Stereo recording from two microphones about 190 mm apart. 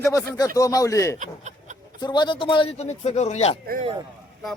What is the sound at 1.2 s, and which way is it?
Speech, 40° right (ahead or behind).